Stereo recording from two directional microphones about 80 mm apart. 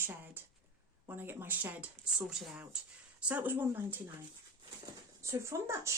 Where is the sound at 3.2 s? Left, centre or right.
Right.